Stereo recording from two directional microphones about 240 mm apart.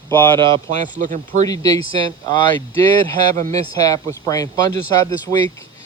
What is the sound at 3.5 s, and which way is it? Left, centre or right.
Speech, centre.